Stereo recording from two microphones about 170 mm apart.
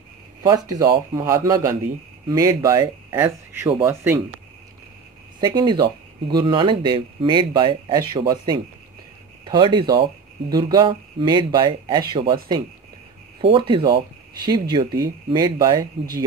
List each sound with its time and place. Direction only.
0.4 s speech: 20° right (ahead or behind)
5.4 s speech: 25° right (ahead or behind)